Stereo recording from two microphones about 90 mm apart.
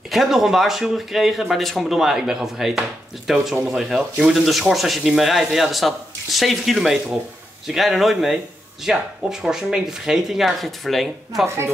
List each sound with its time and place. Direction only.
0.1 s speech: 5° right (ahead or behind)
11.4 s a woman's voice: 30° right (ahead or behind)